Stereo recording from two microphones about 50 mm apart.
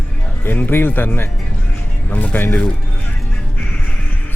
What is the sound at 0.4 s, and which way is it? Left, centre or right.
Speech, left.